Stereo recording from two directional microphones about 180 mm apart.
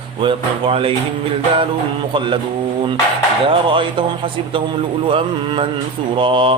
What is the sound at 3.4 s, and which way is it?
Speech, 25° right (ahead or behind).